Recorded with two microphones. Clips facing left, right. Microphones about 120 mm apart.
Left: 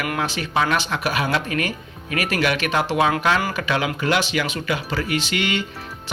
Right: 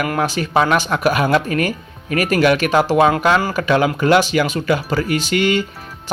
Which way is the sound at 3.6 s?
45° right (ahead or behind).